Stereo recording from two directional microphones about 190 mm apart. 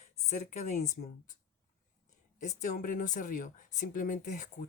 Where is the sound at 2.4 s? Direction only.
40° left (ahead or behind).